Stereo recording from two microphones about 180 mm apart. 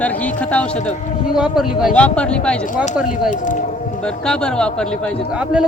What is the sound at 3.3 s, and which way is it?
Speech, 45° left (ahead or behind).